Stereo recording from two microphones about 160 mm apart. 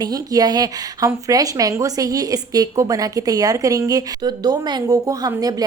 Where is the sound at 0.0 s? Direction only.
25° right (ahead or behind).